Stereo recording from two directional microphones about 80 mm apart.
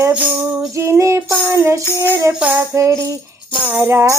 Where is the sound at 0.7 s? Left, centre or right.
Right.